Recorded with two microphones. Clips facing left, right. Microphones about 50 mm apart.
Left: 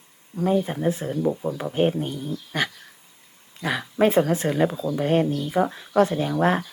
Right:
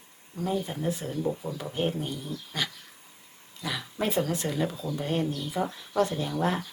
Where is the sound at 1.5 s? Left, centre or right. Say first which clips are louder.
Left 8 dB; left.